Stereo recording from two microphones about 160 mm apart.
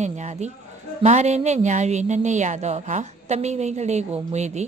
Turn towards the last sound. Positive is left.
turn(degrees=-45)  # may be behind; listen again after turning